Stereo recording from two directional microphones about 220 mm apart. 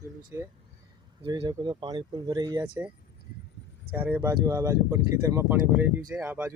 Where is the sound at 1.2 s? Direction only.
20° right (ahead or behind).